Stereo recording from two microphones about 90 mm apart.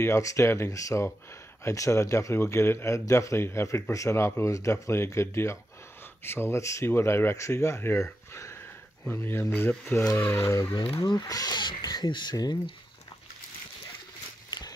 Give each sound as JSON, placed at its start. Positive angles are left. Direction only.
{"t": 0.0, "sound": "speech", "side_deg": 35}
{"t": 11.0, "sound": "speech", "side_deg": 50}